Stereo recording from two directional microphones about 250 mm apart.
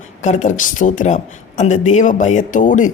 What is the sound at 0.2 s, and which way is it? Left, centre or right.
Speech, left.